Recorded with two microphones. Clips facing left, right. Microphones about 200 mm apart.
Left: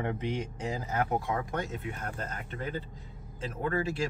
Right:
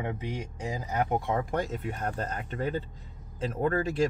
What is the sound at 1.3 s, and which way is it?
Speech, 30° right (ahead or behind).